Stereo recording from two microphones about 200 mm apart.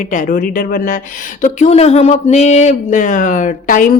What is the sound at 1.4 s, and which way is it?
A woman's voice, 35° left (ahead or behind).